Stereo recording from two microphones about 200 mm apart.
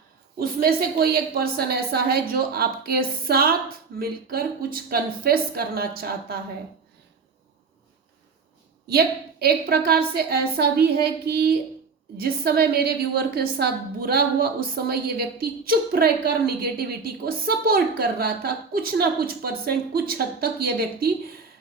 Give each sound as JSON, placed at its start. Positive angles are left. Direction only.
{"t": 0.3, "sound": "a woman's voice", "side_deg": -50}
{"t": 8.9, "sound": "a woman's voice", "side_deg": -50}